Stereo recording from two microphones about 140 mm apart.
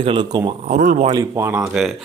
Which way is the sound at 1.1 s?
20° right (ahead or behind).